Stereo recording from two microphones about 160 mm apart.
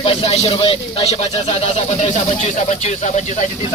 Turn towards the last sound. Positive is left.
turn(degrees=50)  # may be behind; listen again after turning